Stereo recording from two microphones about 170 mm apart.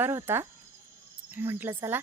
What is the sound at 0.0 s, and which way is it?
Speech, 15° right (ahead or behind).